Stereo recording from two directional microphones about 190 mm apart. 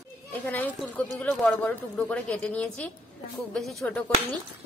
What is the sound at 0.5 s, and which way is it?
A woman's voice, 10° left (ahead or behind).